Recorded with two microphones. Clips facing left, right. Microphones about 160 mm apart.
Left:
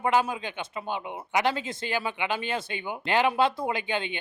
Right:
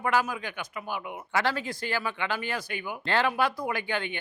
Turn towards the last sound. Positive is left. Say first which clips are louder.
# left 1 dB
turn(degrees=20)  # may be behind; listen again after turning